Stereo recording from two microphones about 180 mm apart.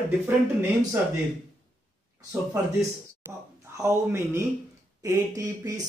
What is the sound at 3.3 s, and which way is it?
Speech, 15° right (ahead or behind).